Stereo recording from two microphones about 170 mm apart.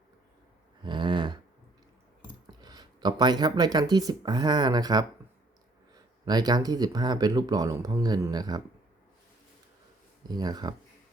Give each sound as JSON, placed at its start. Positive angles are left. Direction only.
{"t": 0.8, "sound": "a sound", "side_deg": -25}
{"t": 2.5, "sound": "speech", "side_deg": -25}
{"t": 10.2, "sound": "speech", "side_deg": -25}